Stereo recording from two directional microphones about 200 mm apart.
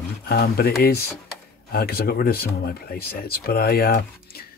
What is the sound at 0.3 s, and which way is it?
Speech, 50° left (ahead or behind).